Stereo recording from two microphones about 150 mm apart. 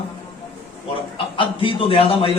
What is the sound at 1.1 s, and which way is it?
A man's voice, 35° left (ahead or behind).